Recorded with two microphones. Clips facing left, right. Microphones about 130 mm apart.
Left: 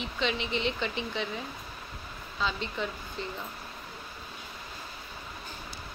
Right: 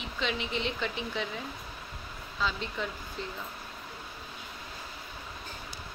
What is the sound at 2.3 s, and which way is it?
Speech, centre (ahead or behind).